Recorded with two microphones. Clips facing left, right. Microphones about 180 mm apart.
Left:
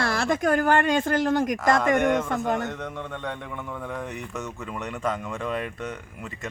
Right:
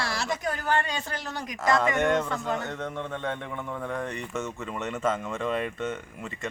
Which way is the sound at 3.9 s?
5° left (ahead or behind).